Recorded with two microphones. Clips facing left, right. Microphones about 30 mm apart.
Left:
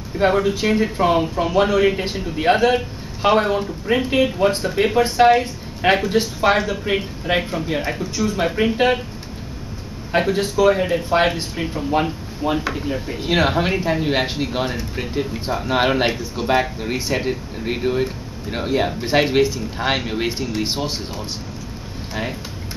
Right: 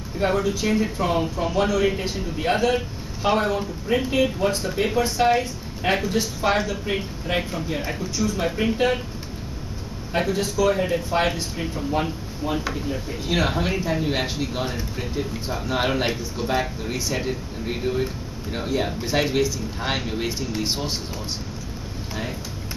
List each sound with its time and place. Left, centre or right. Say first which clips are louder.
0.2 s a man's voice: left 5 dB; left
10.1 s a man's voice: left 5 dB; left
19.8 s speech: left 6 dB; centre
20.1 s a man's voice: left 4 dB; left
20.4 s speech: left 3 dB; centre